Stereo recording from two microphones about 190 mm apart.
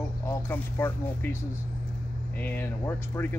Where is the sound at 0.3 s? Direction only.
10° left (ahead or behind).